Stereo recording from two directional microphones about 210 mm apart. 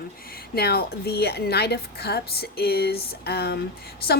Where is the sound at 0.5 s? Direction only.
50° left (ahead or behind).